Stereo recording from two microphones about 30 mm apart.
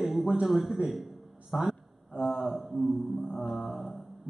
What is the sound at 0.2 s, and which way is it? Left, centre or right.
A man's voice, centre.